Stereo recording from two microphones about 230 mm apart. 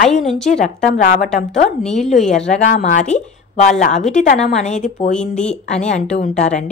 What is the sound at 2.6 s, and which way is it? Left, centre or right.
Speech, left.